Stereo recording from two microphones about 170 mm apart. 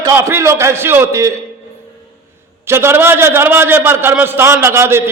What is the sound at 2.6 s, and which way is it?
A man's voice, 15° right (ahead or behind).